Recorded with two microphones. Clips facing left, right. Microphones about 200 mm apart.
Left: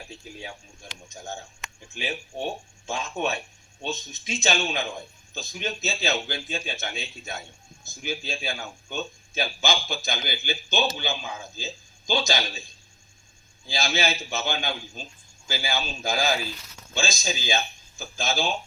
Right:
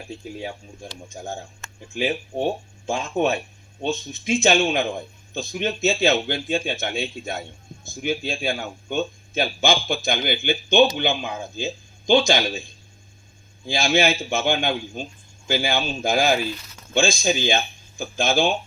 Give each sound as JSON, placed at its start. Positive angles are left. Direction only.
{"t": 0.4, "sound": "speech", "side_deg": -55}
{"t": 1.6, "sound": "a sound", "side_deg": 15}
{"t": 2.0, "sound": "speech", "side_deg": -55}
{"t": 13.7, "sound": "a man's voice", "side_deg": -55}